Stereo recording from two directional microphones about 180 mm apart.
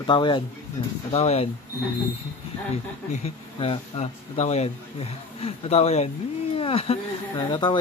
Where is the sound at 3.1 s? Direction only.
35° left (ahead or behind).